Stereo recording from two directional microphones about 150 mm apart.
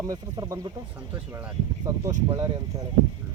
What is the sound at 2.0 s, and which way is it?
Speech, 20° right (ahead or behind).